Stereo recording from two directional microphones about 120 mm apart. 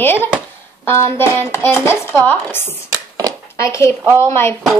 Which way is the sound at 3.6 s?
25° left (ahead or behind).